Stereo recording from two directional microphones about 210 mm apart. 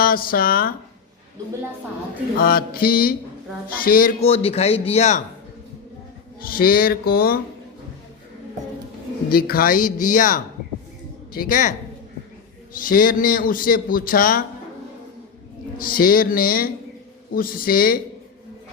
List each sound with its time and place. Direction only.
0.0 s a man's voice: 45° left (ahead or behind)
2.4 s a man's voice: 45° left (ahead or behind)
4.2 s speech: 30° left (ahead or behind)
6.4 s a man's voice: 45° left (ahead or behind)
9.3 s speech: 45° left (ahead or behind)
12.7 s a man's voice: 40° left (ahead or behind)
15.8 s a man's voice: 45° left (ahead or behind)